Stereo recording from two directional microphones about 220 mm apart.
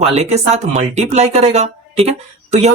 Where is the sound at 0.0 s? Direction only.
30° right (ahead or behind).